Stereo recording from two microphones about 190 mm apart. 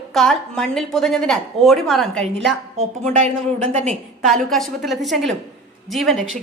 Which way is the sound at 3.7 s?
35° right (ahead or behind).